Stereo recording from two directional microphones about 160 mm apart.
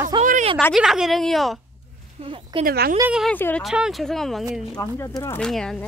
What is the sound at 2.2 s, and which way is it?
Speech, 35° right (ahead or behind).